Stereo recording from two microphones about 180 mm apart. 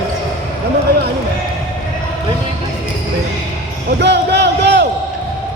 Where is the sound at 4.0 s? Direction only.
70° right (ahead or behind).